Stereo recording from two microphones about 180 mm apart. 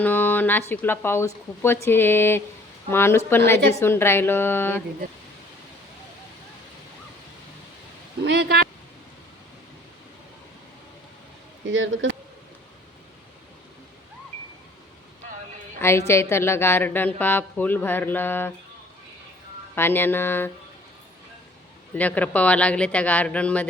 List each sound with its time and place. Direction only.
0.0 s a woman's voice: 10° left (ahead or behind)
8.2 s speech: 70° right (ahead or behind)
11.7 s speech: 90° right
15.8 s a woman's voice: 15° left (ahead or behind)
19.7 s a woman's voice: 10° left (ahead or behind)
21.9 s a woman's voice: 10° left (ahead or behind)